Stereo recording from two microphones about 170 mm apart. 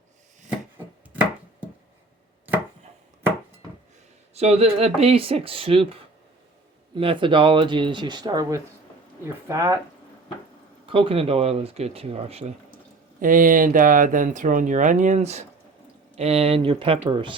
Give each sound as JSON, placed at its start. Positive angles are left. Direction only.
{"t": 4.4, "sound": "speech", "side_deg": -35}
{"t": 10.8, "sound": "speech", "side_deg": -30}
{"t": 13.1, "sound": "speech", "side_deg": -50}